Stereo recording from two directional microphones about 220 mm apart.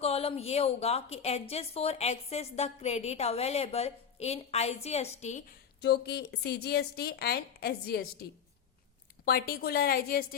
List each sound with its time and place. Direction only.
0.0 s a woman's voice: 25° left (ahead or behind)
5.8 s a woman's voice: 50° left (ahead or behind)
9.2 s a woman's voice: 45° left (ahead or behind)